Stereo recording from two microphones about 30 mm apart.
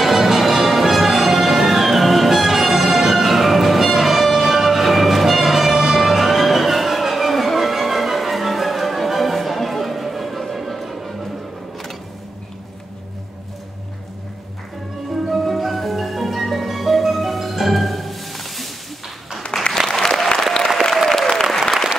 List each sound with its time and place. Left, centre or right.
0.0 s music: centre
15.1 s music: centre
19.5 s applause: left
20.9 s applause: centre